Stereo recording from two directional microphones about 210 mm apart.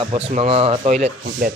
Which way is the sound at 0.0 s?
30° right (ahead or behind).